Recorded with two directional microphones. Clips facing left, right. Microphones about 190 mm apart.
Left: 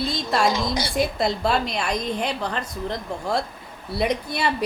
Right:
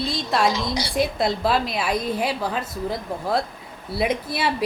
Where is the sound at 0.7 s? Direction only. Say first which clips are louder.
Even; 50° left (ahead or behind).